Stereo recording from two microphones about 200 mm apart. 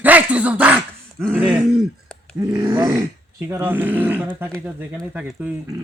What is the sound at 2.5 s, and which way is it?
Groan, 15° right (ahead or behind).